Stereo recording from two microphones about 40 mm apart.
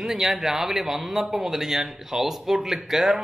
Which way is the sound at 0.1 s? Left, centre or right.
Centre.